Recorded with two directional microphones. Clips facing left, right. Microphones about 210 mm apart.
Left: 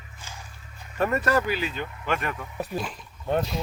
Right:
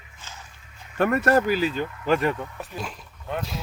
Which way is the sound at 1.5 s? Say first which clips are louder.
Right 5 dB; 40° right (ahead or behind).